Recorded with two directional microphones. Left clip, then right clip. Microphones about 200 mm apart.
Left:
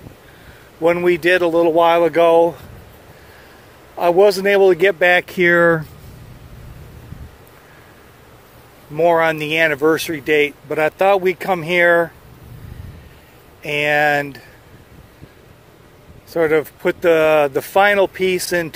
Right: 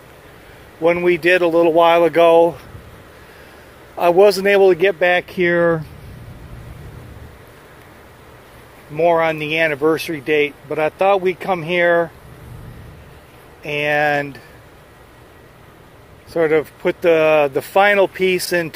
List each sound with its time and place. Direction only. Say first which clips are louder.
0.8 s speech: even; 15° left (ahead or behind)
3.9 s speech: right 1 dB; 5° left (ahead or behind); by 5.9 s 25° left (ahead or behind)
8.9 s speech: left 1 dB; 20° left (ahead or behind)
13.6 s speech: left 1 dB; 15° left (ahead or behind)
16.3 s speech: even; 10° left (ahead or behind)